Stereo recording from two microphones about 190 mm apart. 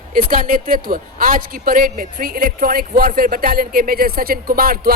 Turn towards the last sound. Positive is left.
turn(degrees=-50)  # may be behind; listen again after turning